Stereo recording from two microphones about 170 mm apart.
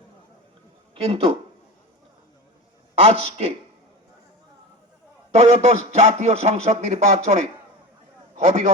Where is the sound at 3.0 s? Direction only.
35° right (ahead or behind).